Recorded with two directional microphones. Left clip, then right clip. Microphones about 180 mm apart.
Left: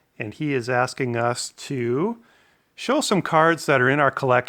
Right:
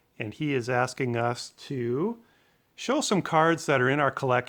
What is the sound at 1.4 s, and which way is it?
Speech, 50° left (ahead or behind).